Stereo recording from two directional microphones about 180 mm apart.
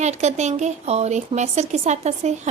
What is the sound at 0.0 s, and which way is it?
A woman's voice, 40° right (ahead or behind).